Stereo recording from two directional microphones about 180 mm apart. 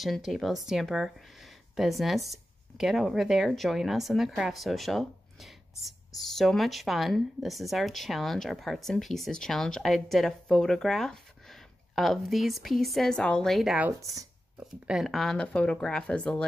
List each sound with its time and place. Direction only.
0.0 s speech: centre (ahead or behind)
13.8 s speech: 15° right (ahead or behind)
14.9 s speech: centre (ahead or behind)